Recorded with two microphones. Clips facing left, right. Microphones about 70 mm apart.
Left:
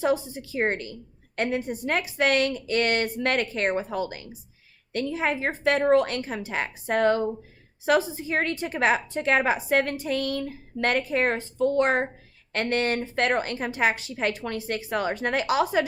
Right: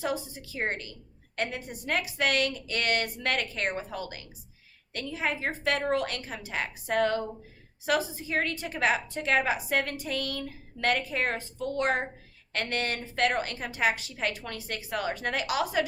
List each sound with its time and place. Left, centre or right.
0.5 s a woman's voice: left
4.9 s a woman's voice: left